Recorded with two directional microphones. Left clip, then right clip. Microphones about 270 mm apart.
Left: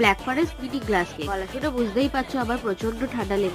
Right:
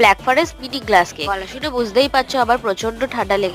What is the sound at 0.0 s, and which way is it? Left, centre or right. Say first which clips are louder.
A woman's voice: right 8 dB; right.